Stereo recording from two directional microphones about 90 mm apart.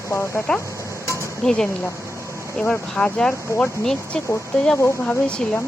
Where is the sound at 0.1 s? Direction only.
25° left (ahead or behind).